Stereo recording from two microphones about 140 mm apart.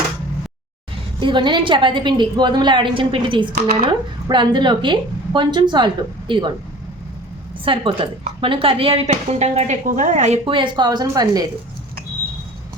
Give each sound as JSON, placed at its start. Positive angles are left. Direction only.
{"t": 1.2, "sound": "a woman's voice", "side_deg": -35}
{"t": 7.6, "sound": "a woman's voice", "side_deg": -40}
{"t": 10.4, "sound": "speech", "side_deg": -35}